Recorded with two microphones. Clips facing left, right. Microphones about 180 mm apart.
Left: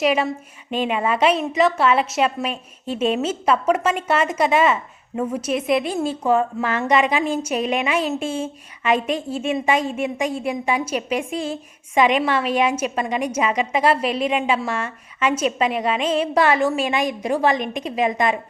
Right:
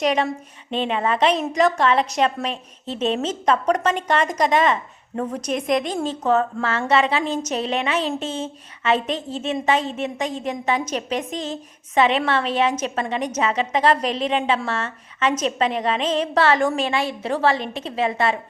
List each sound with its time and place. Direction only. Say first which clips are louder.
0.0 s a woman's voice: left 1 dB; 5° left (ahead or behind)